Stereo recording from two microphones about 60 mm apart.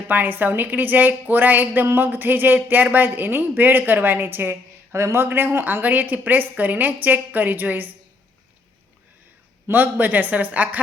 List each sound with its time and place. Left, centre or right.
0.1 s a woman's voice: right
9.6 s a woman's voice: right